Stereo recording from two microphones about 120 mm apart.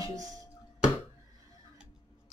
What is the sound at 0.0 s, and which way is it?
Music, 30° right (ahead or behind).